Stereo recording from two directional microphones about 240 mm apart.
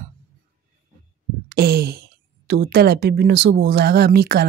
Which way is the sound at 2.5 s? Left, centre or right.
Right.